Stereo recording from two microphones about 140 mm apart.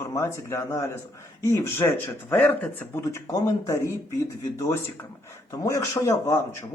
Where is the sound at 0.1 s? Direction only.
20° left (ahead or behind).